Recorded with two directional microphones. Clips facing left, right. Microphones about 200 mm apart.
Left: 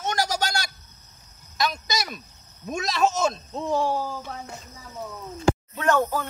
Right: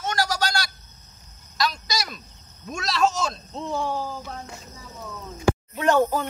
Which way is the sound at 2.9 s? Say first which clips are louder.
Even; 20° left (ahead or behind).